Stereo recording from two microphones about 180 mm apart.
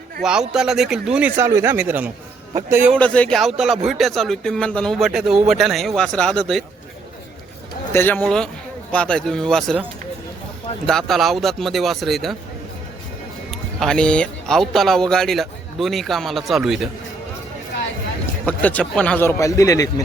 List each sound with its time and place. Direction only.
0.2 s a man's voice: 5° right (ahead or behind)
2.9 s a man's voice: 5° left (ahead or behind)
7.9 s a man's voice: 10° left (ahead or behind)
10.8 s a man's voice: centre (ahead or behind)
13.5 s a man's voice: 5° left (ahead or behind)
18.4 s a man's voice: 5° left (ahead or behind)